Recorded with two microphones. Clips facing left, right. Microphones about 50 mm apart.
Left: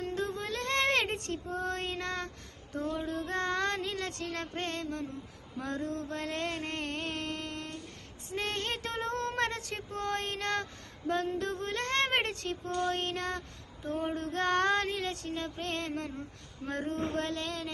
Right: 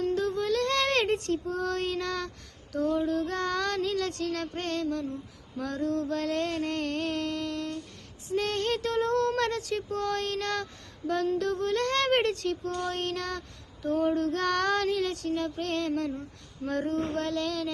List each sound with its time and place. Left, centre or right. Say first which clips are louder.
0.0 s music: right 7 dB; left
2.7 s female singing: right 7 dB; left
5.5 s a sound: right 6 dB; left
8.3 s female singing: right 6 dB; left